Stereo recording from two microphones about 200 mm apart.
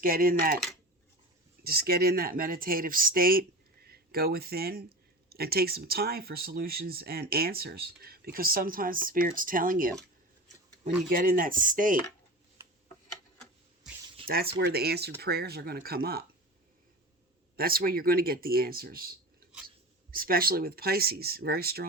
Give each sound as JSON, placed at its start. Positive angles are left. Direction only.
{"t": 0.0, "sound": "speech", "side_deg": -45}
{"t": 1.6, "sound": "speech", "side_deg": -50}
{"t": 14.3, "sound": "speech", "side_deg": -50}
{"t": 17.6, "sound": "speech", "side_deg": -50}